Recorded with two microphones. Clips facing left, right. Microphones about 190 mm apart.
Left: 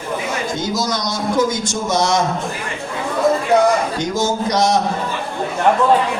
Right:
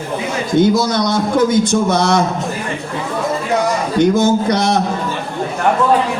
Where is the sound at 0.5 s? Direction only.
60° right (ahead or behind).